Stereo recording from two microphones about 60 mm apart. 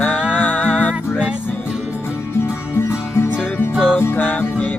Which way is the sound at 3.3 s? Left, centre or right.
Left.